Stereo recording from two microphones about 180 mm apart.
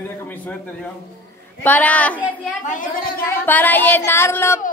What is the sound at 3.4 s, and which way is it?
Speech, 10° left (ahead or behind).